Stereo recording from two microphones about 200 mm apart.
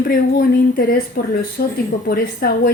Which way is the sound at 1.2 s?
45° left (ahead or behind).